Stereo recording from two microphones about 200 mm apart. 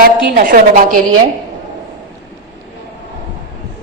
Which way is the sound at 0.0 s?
45° right (ahead or behind).